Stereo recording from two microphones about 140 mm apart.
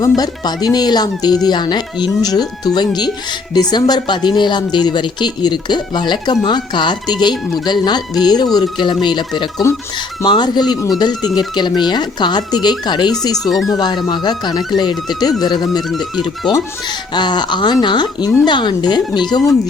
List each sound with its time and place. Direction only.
0.0 s speech: 30° left (ahead or behind)
13.3 s speech: centre (ahead or behind)
13.7 s speech: 30° left (ahead or behind)
17.2 s speech: 30° left (ahead or behind)